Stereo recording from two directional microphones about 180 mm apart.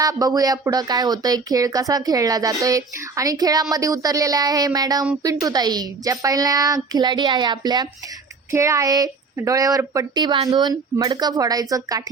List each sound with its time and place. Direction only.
0.0 s speech: 20° right (ahead or behind)